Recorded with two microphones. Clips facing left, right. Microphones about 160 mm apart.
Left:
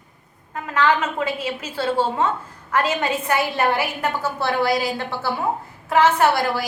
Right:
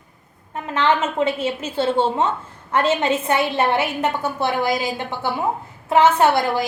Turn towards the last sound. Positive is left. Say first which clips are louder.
# right 2 dB
turn(degrees=-20)  # may be behind; listen again after turning